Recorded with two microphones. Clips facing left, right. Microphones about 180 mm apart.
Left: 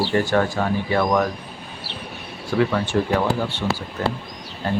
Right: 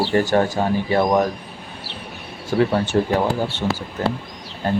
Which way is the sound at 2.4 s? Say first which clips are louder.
Right 2 dB; 35° right (ahead or behind).